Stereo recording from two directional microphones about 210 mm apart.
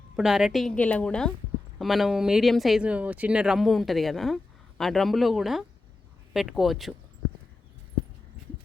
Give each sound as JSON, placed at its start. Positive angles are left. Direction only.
{"t": 0.2, "sound": "speech", "side_deg": 0}